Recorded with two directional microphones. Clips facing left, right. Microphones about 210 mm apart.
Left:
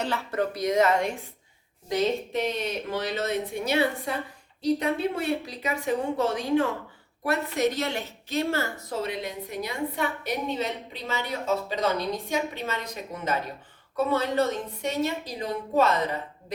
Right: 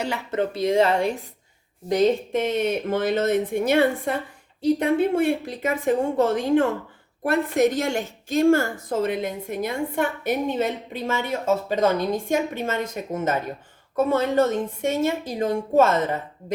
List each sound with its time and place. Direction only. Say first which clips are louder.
0.0 s a woman's voice: right 3 dB; 15° right (ahead or behind); by 1.1 s 30° right (ahead or behind)
1.9 s a woman's voice: right 6 dB; 50° right (ahead or behind)